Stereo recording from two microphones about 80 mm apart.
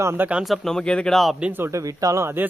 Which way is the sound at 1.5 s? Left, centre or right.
Right.